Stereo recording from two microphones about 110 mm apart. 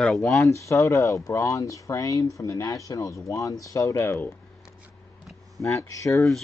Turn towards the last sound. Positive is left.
turn(degrees=30)  # may be behind; listen again after turning